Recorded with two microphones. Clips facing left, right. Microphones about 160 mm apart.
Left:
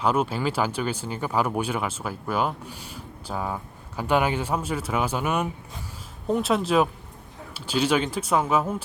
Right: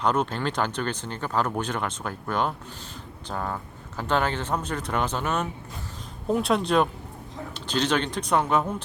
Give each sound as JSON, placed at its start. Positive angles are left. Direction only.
{"t": 0.0, "sound": "speech", "side_deg": 5}